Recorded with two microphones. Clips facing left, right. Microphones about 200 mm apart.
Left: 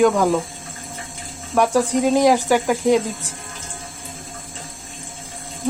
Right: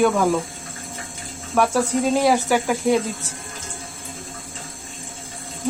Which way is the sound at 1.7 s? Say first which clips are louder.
Left 3 dB; 15° left (ahead or behind).